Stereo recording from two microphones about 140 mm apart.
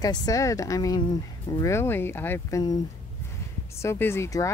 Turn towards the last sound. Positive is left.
turn(degrees=20)  # may be behind; listen again after turning